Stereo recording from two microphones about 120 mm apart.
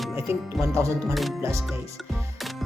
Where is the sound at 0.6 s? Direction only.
25° right (ahead or behind).